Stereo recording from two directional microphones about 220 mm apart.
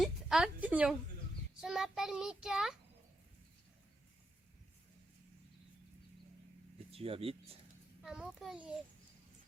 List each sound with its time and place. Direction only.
0.0 s a woman's voice: centre (ahead or behind)
1.6 s child singing: centre (ahead or behind)
6.9 s speech: 25° right (ahead or behind)
8.0 s child singing: 5° right (ahead or behind)